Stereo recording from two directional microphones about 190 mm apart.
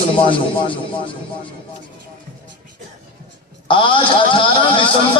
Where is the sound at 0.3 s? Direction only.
25° left (ahead or behind).